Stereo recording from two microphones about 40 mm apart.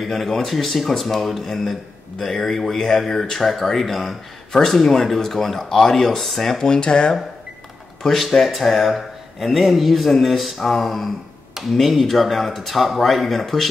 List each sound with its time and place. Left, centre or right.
0.0 s speech: centre
6.6 s speech: left
8.0 s speech: centre